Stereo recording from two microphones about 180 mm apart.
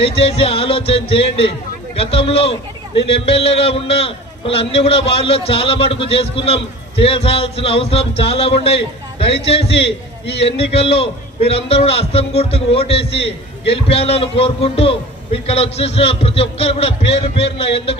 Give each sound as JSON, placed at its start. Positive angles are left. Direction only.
{"t": 0.0, "sound": "a man's voice", "side_deg": 30}